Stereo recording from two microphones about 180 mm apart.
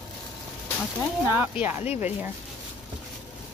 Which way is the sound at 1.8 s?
40° left (ahead or behind).